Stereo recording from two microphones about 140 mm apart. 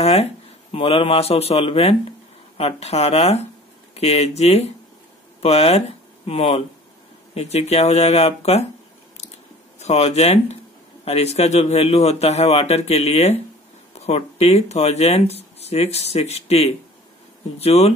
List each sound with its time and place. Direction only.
0.0 s a man's voice: 45° left (ahead or behind)
9.8 s a man's voice: 50° left (ahead or behind)